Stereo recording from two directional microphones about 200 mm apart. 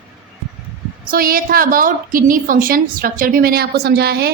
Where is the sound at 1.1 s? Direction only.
45° right (ahead or behind).